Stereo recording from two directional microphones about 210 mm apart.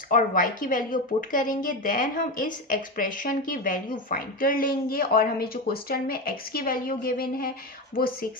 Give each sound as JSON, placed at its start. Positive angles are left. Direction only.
{"t": 0.1, "sound": "a woman's voice", "side_deg": 40}